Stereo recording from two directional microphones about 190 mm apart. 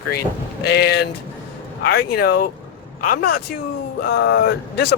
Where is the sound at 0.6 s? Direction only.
60° left (ahead or behind).